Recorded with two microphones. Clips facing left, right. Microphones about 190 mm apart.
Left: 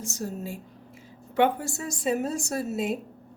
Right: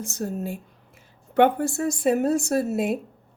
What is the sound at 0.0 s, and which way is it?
A woman's voice, 60° right (ahead or behind).